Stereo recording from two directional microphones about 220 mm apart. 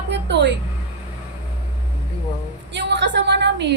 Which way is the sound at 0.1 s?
50° right (ahead or behind).